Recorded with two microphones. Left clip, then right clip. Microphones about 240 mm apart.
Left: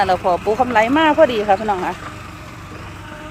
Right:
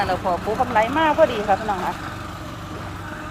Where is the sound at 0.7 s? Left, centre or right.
Left.